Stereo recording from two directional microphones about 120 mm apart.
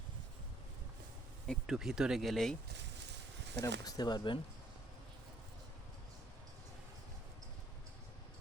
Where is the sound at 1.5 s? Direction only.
Centre (ahead or behind).